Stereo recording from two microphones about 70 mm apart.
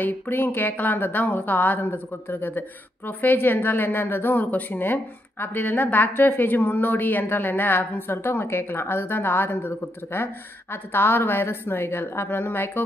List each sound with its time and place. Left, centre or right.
0.0 s a woman's voice: left